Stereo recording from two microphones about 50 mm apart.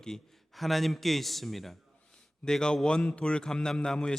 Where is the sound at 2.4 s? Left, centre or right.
Centre.